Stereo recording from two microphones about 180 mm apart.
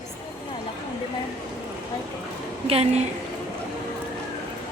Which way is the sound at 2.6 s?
35° right (ahead or behind).